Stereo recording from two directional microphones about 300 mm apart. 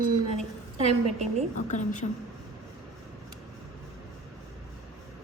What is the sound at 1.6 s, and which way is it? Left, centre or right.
Speech, left.